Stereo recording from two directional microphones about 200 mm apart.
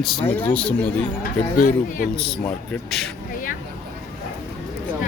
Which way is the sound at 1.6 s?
40° left (ahead or behind).